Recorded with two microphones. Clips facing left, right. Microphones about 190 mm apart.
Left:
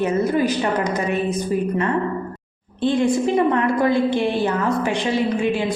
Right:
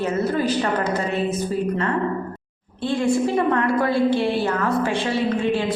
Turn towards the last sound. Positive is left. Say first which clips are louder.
# left 1 dB
turn(degrees=15)  # may be behind; listen again after turning